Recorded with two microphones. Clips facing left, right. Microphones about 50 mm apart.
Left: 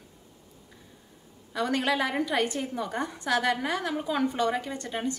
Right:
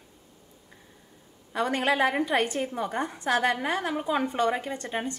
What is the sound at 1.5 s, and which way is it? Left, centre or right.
A woman's voice, right.